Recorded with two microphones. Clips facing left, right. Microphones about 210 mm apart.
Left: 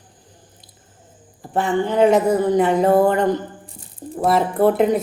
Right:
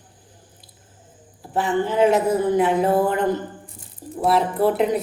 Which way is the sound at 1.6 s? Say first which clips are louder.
Left 2 dB; 5° right (ahead or behind).